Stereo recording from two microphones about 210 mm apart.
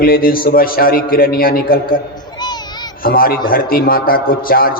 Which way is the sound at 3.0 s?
45° left (ahead or behind).